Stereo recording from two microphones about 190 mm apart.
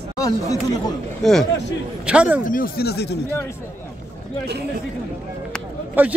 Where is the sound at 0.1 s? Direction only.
20° left (ahead or behind).